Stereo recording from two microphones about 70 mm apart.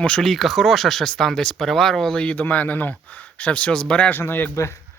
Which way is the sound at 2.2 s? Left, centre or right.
Left.